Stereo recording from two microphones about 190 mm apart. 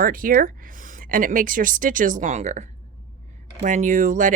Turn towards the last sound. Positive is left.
turn(degrees=-40)  # may be behind; listen again after turning